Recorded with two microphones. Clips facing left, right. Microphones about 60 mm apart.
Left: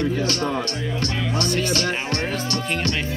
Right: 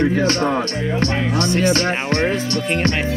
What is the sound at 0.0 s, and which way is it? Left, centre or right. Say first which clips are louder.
Speech: right 6 dB; right.